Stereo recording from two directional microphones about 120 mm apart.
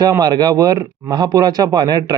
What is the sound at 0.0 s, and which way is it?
A man's voice, 35° right (ahead or behind).